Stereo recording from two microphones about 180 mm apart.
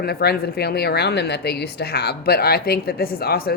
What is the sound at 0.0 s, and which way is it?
Speech, 60° left (ahead or behind).